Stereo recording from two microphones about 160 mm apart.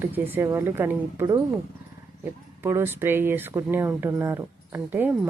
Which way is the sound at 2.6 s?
15° right (ahead or behind).